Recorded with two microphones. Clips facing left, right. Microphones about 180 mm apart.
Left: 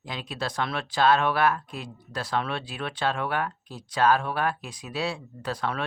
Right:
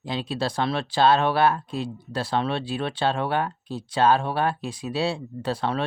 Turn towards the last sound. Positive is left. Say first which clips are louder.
# right 4 dB
turn(degrees=-30)  # may be behind; listen again after turning